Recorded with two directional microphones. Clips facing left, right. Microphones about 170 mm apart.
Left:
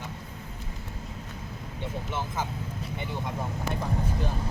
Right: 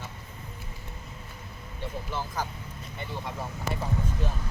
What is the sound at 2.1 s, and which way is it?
Speech, 25° left (ahead or behind).